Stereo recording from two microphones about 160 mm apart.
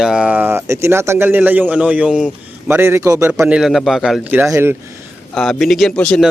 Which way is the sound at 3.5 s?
5° right (ahead or behind).